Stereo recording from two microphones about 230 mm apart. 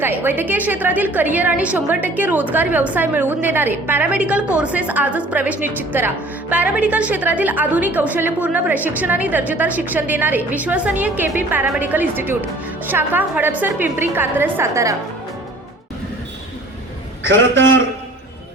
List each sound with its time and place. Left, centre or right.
0.0 s a woman's voice: centre
17.2 s a man's voice: right